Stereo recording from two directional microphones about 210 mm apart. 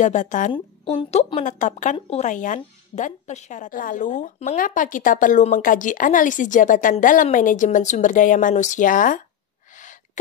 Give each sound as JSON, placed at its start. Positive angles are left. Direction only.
{"t": 0.0, "sound": "speech", "side_deg": 35}